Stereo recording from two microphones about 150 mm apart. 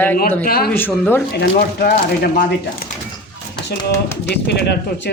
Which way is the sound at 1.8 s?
90° left.